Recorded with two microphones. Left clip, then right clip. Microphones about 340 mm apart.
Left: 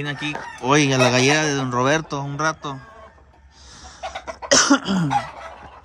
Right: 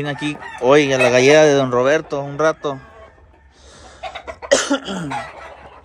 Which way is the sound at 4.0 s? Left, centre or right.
Left.